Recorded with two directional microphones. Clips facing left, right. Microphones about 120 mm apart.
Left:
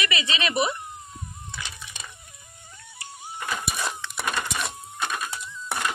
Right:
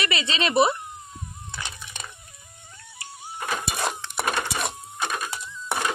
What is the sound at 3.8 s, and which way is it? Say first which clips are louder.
Wood: right 3 dB; 60° right (ahead or behind).